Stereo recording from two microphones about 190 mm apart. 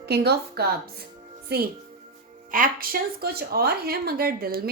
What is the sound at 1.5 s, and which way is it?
Speech, 55° right (ahead or behind).